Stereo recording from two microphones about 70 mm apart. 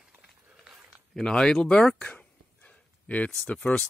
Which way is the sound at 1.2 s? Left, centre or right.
Centre.